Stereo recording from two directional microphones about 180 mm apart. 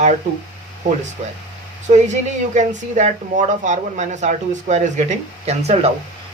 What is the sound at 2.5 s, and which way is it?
Speech, 45° right (ahead or behind).